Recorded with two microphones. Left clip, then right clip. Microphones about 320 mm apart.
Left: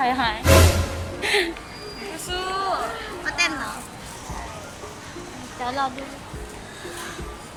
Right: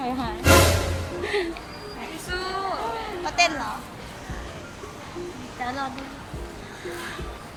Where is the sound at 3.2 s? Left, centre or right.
Centre.